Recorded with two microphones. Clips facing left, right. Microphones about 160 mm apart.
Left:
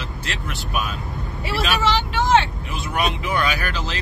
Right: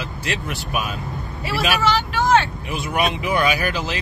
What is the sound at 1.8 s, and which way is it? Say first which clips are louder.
Speech: right 1 dB; 20° left (ahead or behind).